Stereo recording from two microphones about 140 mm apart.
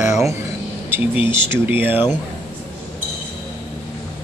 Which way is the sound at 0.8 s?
15° right (ahead or behind).